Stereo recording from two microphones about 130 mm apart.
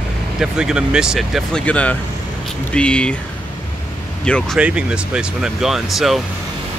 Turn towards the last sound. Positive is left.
turn(degrees=0)  # may be behind; listen again after turning